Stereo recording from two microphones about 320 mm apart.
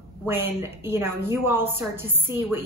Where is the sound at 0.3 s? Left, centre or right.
Centre.